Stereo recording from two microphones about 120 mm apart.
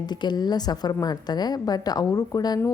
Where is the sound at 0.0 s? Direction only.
35° left (ahead or behind).